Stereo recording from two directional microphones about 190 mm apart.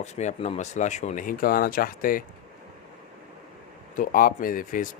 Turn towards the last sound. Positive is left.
turn(degrees=45)  # may be behind; listen again after turning